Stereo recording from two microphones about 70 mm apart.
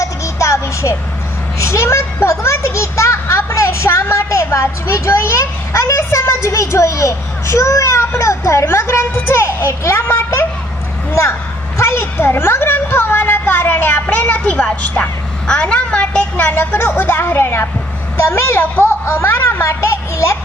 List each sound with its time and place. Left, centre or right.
0.0 s music: left
1.5 s a child's voice: left
12.1 s speech: left; by 16.5 s centre
16.5 s a child's voice: left